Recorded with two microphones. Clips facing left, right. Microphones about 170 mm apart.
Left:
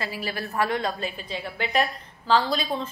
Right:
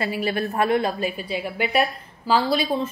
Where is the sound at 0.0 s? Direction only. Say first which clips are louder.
Right 7 dB; 15° right (ahead or behind).